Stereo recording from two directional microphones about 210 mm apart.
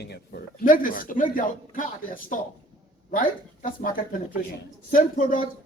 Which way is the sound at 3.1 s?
40° left (ahead or behind).